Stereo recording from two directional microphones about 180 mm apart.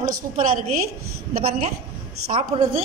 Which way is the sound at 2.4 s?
30° right (ahead or behind).